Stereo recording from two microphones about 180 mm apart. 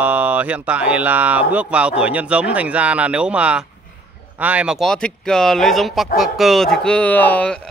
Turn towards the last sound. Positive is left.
turn(degrees=5)  # may be behind; listen again after turning